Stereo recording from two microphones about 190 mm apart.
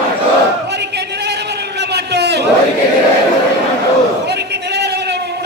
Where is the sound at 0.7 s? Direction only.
60° right (ahead or behind).